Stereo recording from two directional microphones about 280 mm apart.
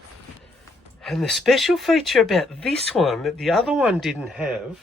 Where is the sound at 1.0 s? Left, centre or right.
Centre.